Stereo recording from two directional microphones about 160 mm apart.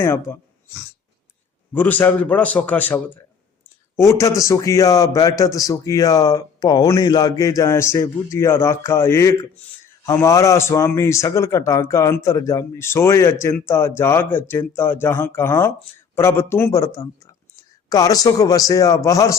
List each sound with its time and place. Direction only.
0.0 s speech: 15° left (ahead or behind)
1.7 s a man's voice: 10° left (ahead or behind)